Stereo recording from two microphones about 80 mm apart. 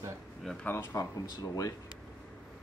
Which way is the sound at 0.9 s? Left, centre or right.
Left.